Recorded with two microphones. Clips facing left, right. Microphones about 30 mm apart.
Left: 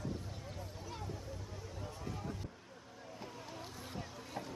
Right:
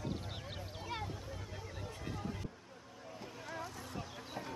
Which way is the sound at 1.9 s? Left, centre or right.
Right.